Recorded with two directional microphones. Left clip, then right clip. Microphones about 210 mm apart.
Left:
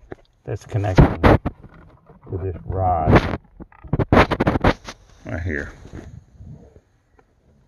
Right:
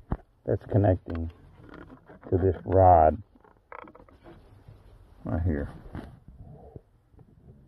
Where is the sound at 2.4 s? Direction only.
35° right (ahead or behind).